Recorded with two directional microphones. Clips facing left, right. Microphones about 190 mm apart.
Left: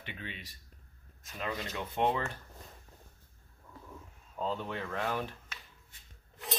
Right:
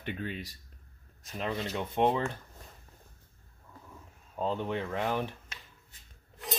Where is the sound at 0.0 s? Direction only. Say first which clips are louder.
Right 8 dB; 45° right (ahead or behind).